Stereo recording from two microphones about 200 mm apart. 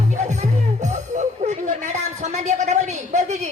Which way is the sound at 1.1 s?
35° right (ahead or behind).